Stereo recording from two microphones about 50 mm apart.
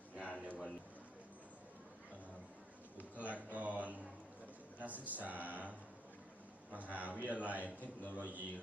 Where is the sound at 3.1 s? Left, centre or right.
Right.